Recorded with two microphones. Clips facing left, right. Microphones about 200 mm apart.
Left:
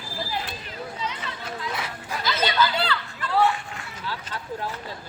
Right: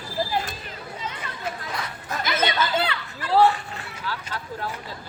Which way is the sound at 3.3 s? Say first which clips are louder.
Right 4 dB; 35° right (ahead or behind).